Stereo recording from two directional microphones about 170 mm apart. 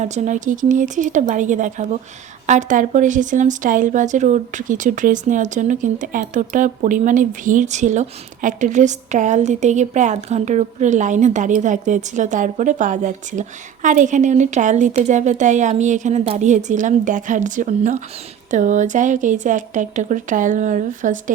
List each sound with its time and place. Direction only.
0.0 s speech: 45° right (ahead or behind)